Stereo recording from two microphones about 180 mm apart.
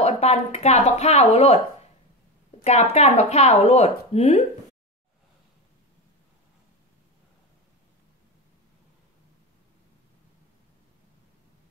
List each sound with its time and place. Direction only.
0.0 s speech: 35° left (ahead or behind)
2.6 s speech: 40° left (ahead or behind)